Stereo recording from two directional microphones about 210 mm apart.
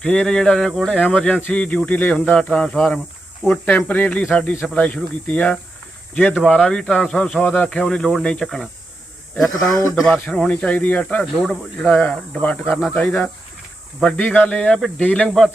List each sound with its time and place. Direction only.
0.0 s a man's voice: 5° left (ahead or behind)
9.6 s a man's voice: 15° left (ahead or behind)
10.0 s speech: 5° left (ahead or behind)